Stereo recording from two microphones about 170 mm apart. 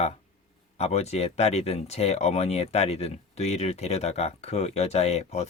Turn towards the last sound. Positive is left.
turn(degrees=40)  # may be behind; listen again after turning